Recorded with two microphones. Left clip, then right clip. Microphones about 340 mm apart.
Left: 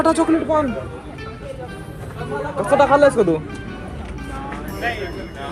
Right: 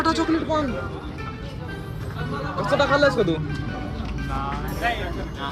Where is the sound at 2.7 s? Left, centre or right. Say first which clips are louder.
Left 6 dB; left.